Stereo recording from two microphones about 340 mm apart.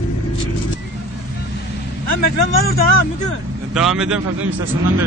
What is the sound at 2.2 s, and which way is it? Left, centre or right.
Speech, left.